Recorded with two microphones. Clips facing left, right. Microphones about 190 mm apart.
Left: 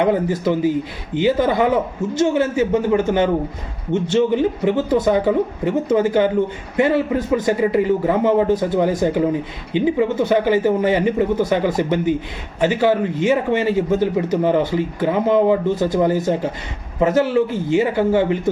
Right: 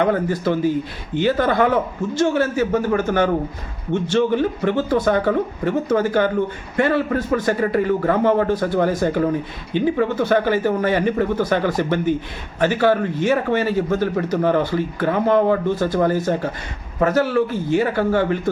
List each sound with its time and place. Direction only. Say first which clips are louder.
0.0 s a man's voice: left 1 dB; 15° left (ahead or behind)